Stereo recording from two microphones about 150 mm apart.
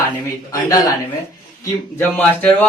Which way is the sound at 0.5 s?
25° left (ahead or behind).